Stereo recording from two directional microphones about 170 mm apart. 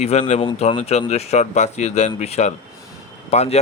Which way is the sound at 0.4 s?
30° left (ahead or behind).